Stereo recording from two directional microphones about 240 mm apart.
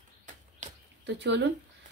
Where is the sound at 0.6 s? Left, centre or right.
Right.